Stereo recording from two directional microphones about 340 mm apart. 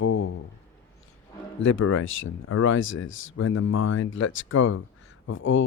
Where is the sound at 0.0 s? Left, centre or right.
Left.